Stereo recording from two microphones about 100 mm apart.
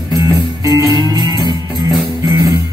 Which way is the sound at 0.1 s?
35° right (ahead or behind).